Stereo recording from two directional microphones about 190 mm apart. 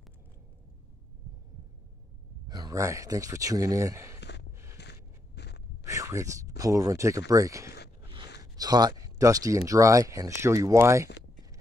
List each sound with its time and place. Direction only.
2.4 s speech: 20° right (ahead or behind)
4.2 s a sound: 65° left (ahead or behind)
4.7 s biting: 60° left (ahead or behind)
5.9 s speech: 15° right (ahead or behind)